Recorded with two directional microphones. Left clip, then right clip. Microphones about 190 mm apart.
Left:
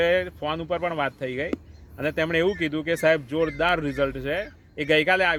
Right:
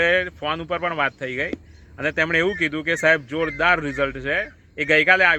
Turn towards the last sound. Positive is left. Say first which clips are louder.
# right 5 dB
turn(degrees=15)  # may be behind; listen again after turning